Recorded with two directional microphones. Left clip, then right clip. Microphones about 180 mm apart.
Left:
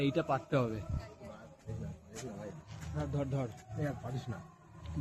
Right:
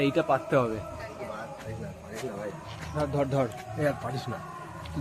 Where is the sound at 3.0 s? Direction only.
15° right (ahead or behind).